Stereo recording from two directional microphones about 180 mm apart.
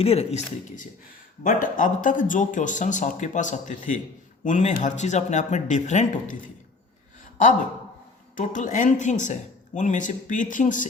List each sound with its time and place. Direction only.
0.0 s speech: 35° left (ahead or behind)
1.5 s speech: 50° left (ahead or behind)
8.4 s speech: 45° left (ahead or behind)